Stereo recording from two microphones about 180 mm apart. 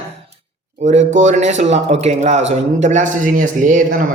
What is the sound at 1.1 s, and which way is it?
Speech, 40° right (ahead or behind).